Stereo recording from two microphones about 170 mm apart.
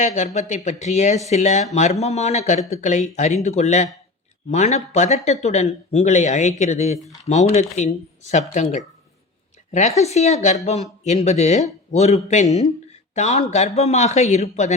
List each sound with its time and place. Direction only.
0.0 s speech: 45° left (ahead or behind)